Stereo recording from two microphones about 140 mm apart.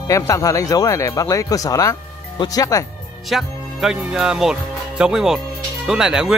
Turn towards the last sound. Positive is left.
turn(degrees=-5)  # may be behind; listen again after turning